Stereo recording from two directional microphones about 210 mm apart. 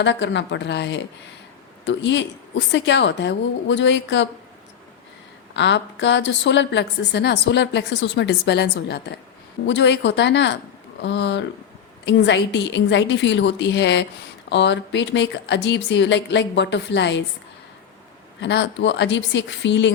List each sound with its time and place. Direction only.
0.0 s a woman's voice: 60° left (ahead or behind)
5.5 s a woman's voice: 55° left (ahead or behind)
18.3 s a woman's voice: 55° left (ahead or behind)